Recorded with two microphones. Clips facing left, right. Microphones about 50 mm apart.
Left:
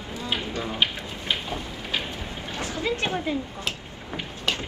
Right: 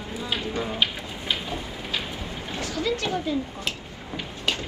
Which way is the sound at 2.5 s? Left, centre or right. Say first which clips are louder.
Even; left.